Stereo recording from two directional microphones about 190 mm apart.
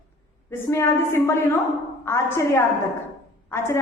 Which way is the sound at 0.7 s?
15° left (ahead or behind).